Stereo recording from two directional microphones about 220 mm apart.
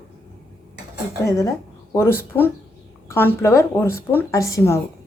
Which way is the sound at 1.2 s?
15° left (ahead or behind).